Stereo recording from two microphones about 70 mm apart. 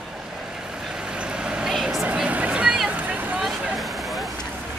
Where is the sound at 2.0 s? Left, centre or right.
Centre.